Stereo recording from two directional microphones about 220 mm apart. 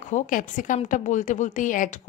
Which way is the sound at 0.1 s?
35° left (ahead or behind).